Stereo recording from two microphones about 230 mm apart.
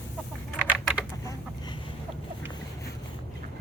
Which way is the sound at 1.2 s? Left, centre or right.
Centre.